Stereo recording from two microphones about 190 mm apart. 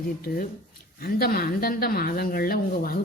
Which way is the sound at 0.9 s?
55° left (ahead or behind).